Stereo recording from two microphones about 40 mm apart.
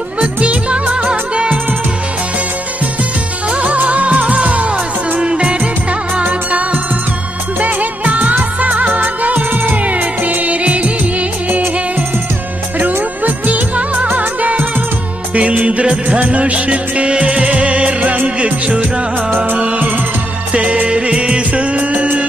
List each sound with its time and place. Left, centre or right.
0.2 s music: right
3.4 s music of bollywood: right
3.7 s music: right
5.2 s music: right
7.6 s music: right
9.9 s music of bollywood: right
12.7 s music: right
13.9 s music: right
15.3 s music: right